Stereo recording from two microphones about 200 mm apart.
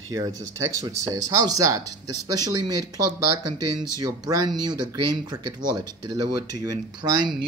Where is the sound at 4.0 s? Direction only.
20° right (ahead or behind).